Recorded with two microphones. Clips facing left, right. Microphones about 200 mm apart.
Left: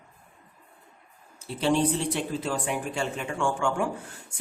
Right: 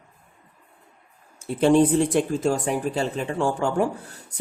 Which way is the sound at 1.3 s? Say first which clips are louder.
Right 7 dB; 50° right (ahead or behind).